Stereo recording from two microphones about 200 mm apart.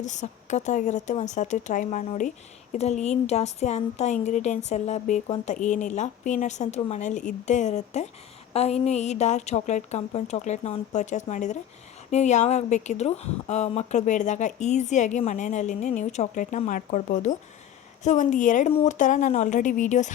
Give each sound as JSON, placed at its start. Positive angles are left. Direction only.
{"t": 0.0, "sound": "speech", "side_deg": 35}